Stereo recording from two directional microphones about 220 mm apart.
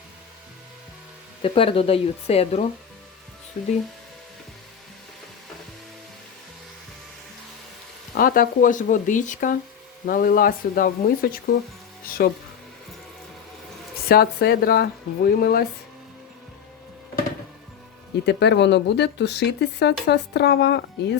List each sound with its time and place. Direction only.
1.4 s speech: 25° left (ahead or behind)
8.1 s speech: 40° left (ahead or behind)
14.1 s speech: 45° left (ahead or behind)
18.3 s speech: 50° left (ahead or behind)